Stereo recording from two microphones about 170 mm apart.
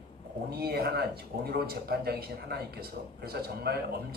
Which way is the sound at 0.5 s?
65° right (ahead or behind).